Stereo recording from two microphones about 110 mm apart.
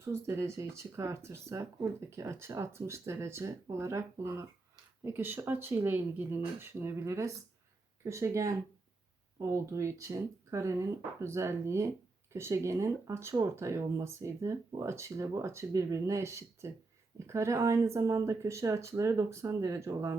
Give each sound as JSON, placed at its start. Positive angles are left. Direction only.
{"t": 0.0, "sound": "speech", "side_deg": -25}